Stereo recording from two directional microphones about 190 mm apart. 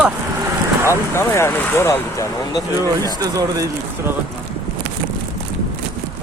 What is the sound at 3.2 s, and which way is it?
Speech, 20° right (ahead or behind).